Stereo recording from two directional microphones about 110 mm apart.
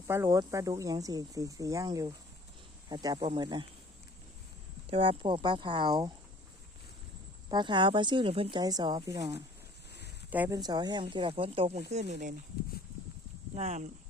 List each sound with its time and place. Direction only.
0.1 s speech: 25° right (ahead or behind); by 3.7 s 45° right (ahead or behind)
4.9 s speech: 55° right (ahead or behind)
7.5 s speech: 45° right (ahead or behind)
8.6 s speech: 35° right (ahead or behind)
10.2 s speech: 15° right (ahead or behind)
10.5 s speech: 40° right (ahead or behind); by 12.2 s 90° right
13.6 s speech: 90° right